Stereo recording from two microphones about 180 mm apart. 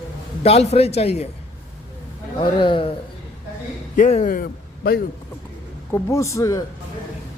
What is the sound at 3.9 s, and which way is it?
Speech, 45° left (ahead or behind).